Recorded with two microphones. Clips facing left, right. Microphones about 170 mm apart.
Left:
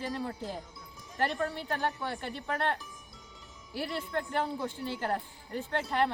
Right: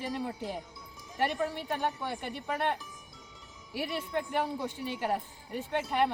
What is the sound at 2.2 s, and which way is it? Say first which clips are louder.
A woman's voice: right 1 dB; 15° right (ahead or behind).